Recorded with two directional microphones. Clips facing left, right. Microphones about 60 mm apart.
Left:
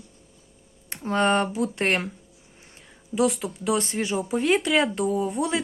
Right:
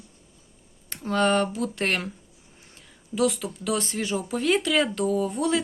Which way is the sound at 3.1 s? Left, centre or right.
Left.